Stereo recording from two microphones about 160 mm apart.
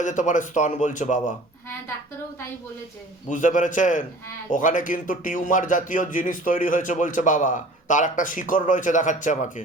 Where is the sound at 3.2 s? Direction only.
50° left (ahead or behind).